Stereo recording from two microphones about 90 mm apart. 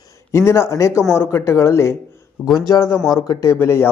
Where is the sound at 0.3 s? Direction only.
30° left (ahead or behind).